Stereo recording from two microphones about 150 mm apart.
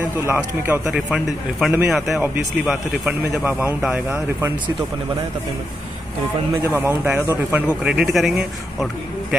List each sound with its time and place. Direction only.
0.2 s speech: 15° right (ahead or behind)
0.9 s speech: 5° right (ahead or behind)
6.6 s speech: 15° right (ahead or behind)